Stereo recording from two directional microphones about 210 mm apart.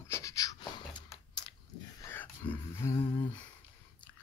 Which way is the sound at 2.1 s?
10° left (ahead or behind).